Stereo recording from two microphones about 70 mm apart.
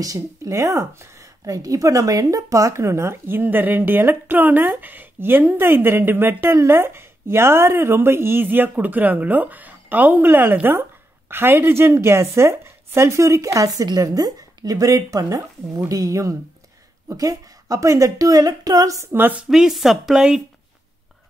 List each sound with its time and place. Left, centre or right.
0.0 s speech: right
1.4 s a woman's voice: right
19.1 s speech: right
19.5 s a woman's voice: centre